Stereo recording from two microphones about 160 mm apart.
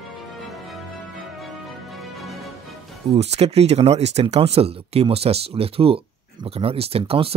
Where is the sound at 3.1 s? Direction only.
40° right (ahead or behind).